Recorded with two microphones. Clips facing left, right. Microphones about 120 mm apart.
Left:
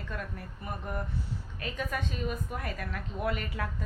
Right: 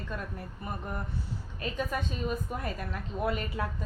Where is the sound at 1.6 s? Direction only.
30° right (ahead or behind).